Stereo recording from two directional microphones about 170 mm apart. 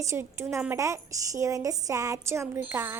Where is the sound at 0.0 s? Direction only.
15° right (ahead or behind).